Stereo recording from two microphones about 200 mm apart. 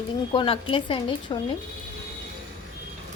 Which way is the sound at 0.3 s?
25° left (ahead or behind).